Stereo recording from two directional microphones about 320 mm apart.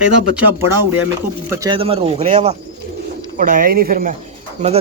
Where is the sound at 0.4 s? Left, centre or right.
Centre.